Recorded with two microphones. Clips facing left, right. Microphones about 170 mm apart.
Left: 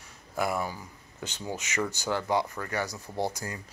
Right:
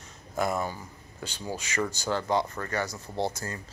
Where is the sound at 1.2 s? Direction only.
20° left (ahead or behind).